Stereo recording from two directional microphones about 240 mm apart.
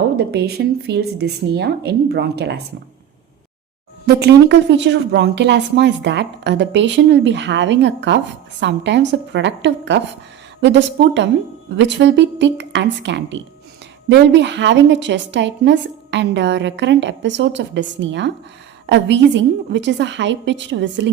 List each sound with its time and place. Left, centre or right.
0.2 s a woman's voice: right
4.0 s a woman's voice: right